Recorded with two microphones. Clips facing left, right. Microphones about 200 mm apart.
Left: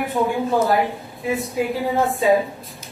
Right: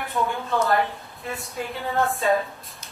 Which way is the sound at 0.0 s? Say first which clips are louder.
Left 5 dB; 15° left (ahead or behind).